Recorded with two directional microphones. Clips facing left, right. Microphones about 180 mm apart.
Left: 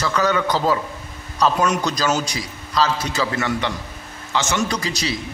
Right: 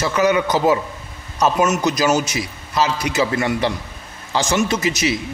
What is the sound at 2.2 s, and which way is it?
A man's voice, 20° right (ahead or behind).